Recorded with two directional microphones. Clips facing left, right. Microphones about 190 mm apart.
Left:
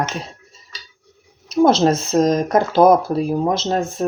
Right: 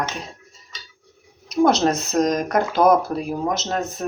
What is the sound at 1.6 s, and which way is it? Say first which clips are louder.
Speech: left 3 dB; 30° left (ahead or behind).